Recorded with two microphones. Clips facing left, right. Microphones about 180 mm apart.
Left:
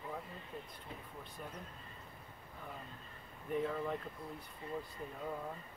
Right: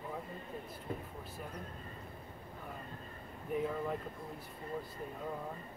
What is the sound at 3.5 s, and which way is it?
Speech, 5° right (ahead or behind).